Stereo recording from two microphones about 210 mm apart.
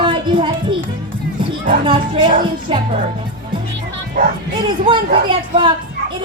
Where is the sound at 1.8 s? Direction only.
25° right (ahead or behind).